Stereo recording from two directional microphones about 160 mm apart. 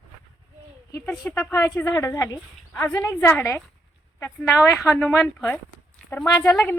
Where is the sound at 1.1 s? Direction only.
10° left (ahead or behind).